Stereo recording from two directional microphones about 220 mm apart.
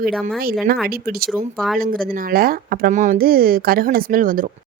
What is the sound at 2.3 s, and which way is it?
A woman's voice, 40° right (ahead or behind).